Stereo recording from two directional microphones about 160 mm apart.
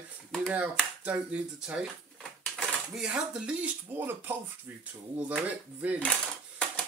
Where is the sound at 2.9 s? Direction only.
5° right (ahead or behind).